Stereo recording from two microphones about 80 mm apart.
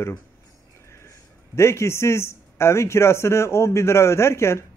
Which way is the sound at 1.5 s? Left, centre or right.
Left.